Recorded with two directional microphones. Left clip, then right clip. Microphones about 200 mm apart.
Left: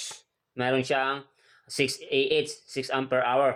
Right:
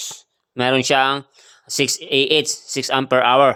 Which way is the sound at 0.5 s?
45° right (ahead or behind).